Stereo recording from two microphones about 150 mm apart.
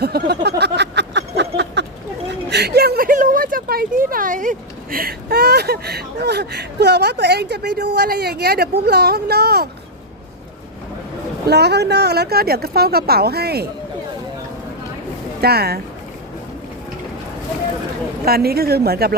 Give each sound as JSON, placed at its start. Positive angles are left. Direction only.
{"t": 0.0, "sound": "a sound", "side_deg": -90}
{"t": 2.6, "sound": "speech", "side_deg": -90}
{"t": 11.4, "sound": "speech", "side_deg": -90}
{"t": 15.4, "sound": "speech", "side_deg": -90}
{"t": 18.3, "sound": "speech", "side_deg": -90}